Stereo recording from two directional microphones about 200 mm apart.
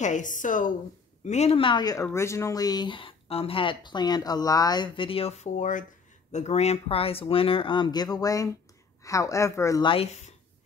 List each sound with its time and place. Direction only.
0.0 s a woman's voice: 40° left (ahead or behind)